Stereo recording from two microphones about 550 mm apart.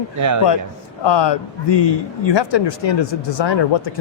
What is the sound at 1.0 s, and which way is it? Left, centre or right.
A man's voice, left.